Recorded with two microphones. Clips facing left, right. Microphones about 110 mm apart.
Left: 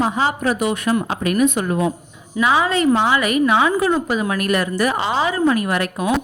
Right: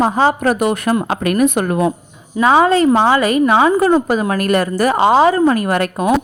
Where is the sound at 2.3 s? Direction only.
35° right (ahead or behind).